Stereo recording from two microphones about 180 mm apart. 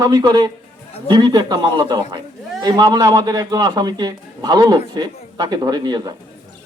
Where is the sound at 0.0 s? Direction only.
20° right (ahead or behind).